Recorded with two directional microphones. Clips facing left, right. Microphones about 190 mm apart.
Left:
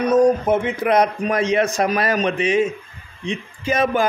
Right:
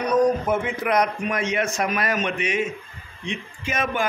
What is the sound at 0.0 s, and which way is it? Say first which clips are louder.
A man's voice: left 4 dB; 25° left (ahead or behind).